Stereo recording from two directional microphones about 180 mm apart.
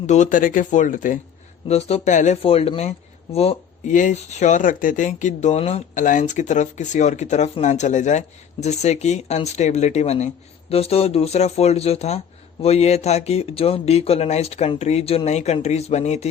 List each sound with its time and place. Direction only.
0.0 s speech: 40° left (ahead or behind)
1.6 s speech: 35° left (ahead or behind)